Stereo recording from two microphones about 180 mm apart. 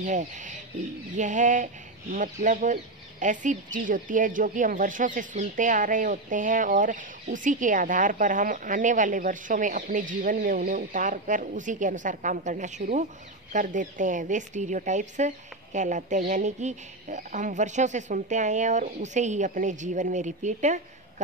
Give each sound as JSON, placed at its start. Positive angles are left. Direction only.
{"t": 0.0, "sound": "speech", "side_deg": -45}